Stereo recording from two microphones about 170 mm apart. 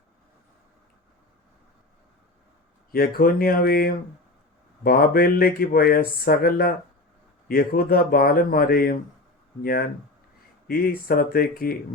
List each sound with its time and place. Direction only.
2.9 s speech: 60° left (ahead or behind)
10.7 s speech: 60° left (ahead or behind)